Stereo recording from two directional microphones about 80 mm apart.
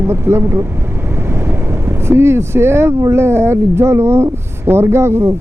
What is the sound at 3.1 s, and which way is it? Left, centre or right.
Speech, right.